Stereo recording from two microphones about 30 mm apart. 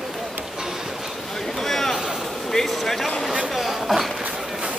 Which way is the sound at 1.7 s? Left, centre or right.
Centre.